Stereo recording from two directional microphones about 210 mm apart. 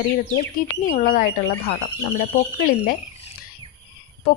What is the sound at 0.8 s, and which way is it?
Speech, 40° left (ahead or behind).